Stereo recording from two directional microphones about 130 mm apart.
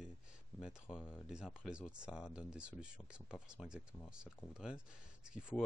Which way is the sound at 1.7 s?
5° right (ahead or behind).